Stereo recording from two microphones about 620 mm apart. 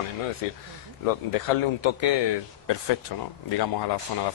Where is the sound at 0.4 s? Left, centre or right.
Left.